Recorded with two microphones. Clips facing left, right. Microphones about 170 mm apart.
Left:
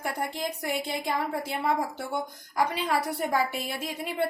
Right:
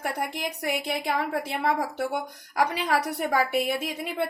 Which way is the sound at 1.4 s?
65° right (ahead or behind).